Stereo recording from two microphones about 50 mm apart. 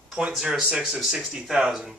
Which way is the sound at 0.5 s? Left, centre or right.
Centre.